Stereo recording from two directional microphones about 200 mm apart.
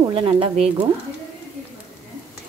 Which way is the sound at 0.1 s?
25° right (ahead or behind).